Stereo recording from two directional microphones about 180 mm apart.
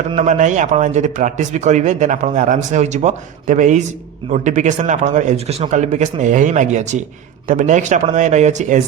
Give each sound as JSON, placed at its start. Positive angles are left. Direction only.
{"t": 0.3, "sound": "speech", "side_deg": -45}